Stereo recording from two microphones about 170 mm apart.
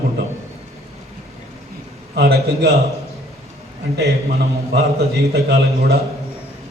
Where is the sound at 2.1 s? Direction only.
70° right (ahead or behind).